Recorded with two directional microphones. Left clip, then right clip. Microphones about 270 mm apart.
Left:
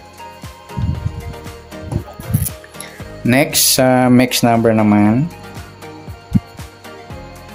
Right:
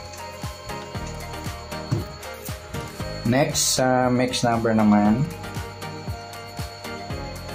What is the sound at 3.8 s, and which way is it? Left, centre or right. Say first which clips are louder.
Speech: left 8 dB; left.